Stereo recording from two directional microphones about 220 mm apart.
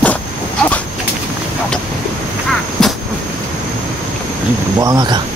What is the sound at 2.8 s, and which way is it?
Vehicle, centre (ahead or behind).